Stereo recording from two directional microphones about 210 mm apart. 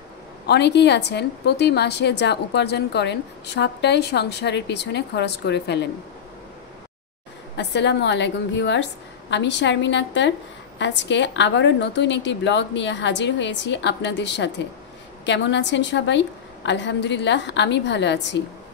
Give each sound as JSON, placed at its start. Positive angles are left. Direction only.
{"t": 0.5, "sound": "a woman's voice", "side_deg": 55}
{"t": 7.5, "sound": "a woman's voice", "side_deg": 55}